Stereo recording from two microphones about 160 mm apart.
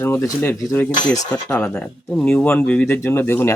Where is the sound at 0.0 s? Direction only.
15° left (ahead or behind).